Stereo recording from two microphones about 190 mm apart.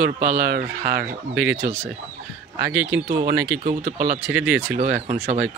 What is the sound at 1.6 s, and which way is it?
Speech, 35° right (ahead or behind).